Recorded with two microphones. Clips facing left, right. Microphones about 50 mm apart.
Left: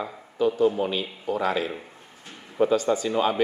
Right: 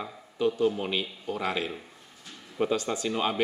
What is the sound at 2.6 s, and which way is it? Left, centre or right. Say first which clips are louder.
Speech: left 6 dB; centre.